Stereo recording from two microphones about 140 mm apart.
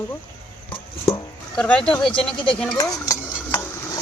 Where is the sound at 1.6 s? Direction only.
5° left (ahead or behind).